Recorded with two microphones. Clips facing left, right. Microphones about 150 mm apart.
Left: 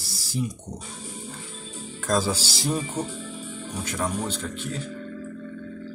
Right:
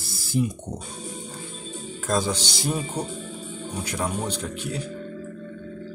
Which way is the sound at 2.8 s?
25° right (ahead or behind).